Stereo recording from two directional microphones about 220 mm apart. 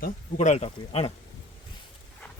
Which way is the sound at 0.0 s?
30° left (ahead or behind).